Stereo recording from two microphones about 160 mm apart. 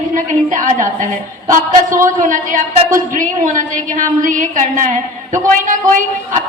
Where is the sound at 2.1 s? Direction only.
55° right (ahead or behind).